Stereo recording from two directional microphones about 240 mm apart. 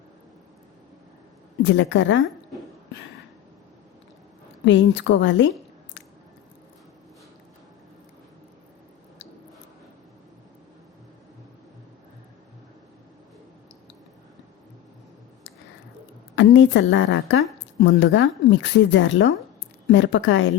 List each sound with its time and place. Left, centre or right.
1.6 s speech: left
4.6 s speech: left
16.3 s a woman's voice: left